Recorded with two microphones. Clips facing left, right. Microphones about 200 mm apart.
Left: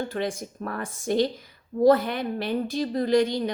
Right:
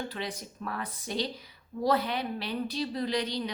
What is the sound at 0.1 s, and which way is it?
A woman's voice, 50° left (ahead or behind).